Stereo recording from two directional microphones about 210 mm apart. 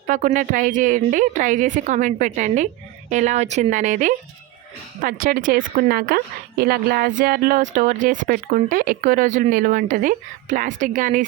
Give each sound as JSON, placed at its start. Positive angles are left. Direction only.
{"t": 0.1, "sound": "a woman's voice", "side_deg": -35}